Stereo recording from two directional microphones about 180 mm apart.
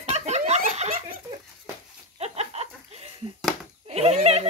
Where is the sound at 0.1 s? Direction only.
40° right (ahead or behind).